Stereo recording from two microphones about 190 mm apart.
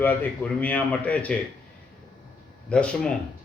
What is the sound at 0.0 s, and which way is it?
A man's voice, 10° left (ahead or behind).